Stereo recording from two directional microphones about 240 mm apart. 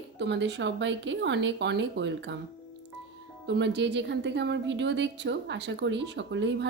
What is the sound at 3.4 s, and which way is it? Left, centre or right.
A woman's voice, right.